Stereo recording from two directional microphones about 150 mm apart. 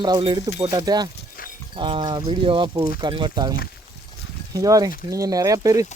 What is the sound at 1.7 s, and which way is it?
Speech, 35° right (ahead or behind).